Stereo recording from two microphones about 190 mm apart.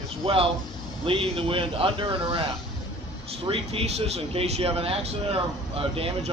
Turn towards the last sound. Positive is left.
turn(degrees=-30)  # may be behind; listen again after turning